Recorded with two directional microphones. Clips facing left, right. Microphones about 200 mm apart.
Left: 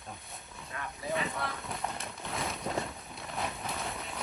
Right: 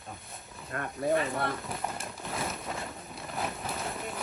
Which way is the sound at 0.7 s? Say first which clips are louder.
Right 8 dB; 50° right (ahead or behind).